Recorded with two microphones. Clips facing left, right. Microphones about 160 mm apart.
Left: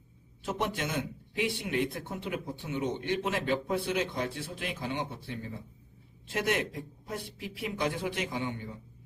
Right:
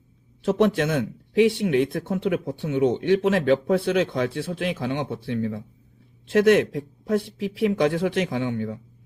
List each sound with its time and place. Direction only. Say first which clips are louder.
0.4 s speech: right 12 dB; 90° right